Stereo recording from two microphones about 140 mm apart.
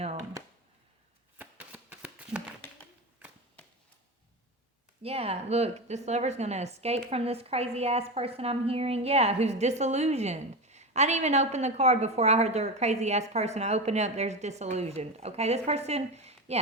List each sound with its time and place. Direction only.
1.4 s shuffling cards: 10° right (ahead or behind)
5.0 s a woman's voice: 45° right (ahead or behind)